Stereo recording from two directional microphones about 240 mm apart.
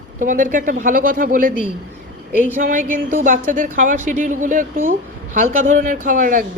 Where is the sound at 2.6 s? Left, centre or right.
Right.